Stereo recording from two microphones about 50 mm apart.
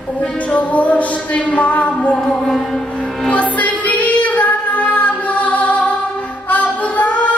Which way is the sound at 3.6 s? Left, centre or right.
Left.